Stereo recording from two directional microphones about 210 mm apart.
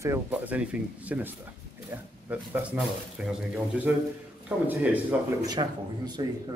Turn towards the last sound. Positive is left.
turn(degrees=-20)  # may be behind; listen again after turning